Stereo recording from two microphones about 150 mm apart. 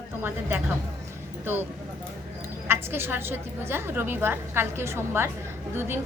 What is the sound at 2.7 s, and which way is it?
A woman's voice, 15° right (ahead or behind).